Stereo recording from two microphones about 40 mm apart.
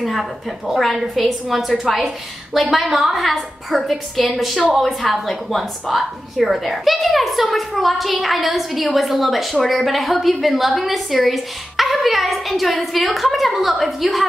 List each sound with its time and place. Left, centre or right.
0.0 s a woman's voice: centre